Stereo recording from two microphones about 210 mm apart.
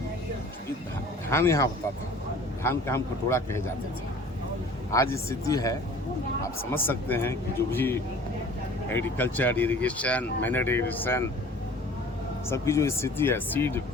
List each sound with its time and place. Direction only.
1.3 s speech: 15° left (ahead or behind)
4.9 s speech: 15° left (ahead or behind)
12.5 s speech: 15° left (ahead or behind)